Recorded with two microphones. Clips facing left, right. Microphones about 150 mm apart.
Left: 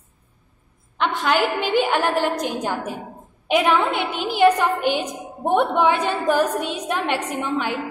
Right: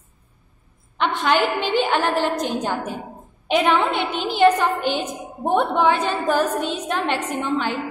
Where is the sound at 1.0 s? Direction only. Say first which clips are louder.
Right 1 dB; 5° left (ahead or behind).